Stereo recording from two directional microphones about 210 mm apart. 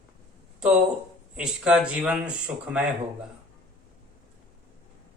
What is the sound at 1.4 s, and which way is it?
Speech, 5° right (ahead or behind).